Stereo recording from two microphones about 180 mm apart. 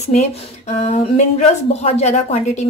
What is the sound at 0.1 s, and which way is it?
Speech, 40° left (ahead or behind).